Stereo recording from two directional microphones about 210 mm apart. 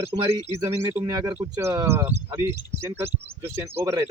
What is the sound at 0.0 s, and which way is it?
Speech, 15° right (ahead or behind).